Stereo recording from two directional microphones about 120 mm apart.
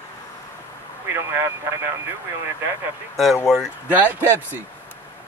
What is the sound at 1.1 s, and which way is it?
Speech, 20° right (ahead or behind).